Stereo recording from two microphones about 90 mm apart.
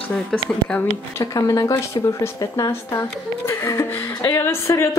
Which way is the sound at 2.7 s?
30° left (ahead or behind).